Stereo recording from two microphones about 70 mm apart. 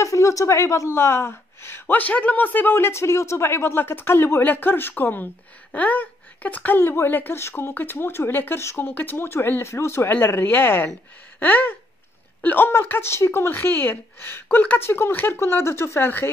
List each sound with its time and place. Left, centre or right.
0.0 s a woman's voice: left
1.9 s a woman's voice: left
11.3 s a sound: left
12.4 s a woman's voice: left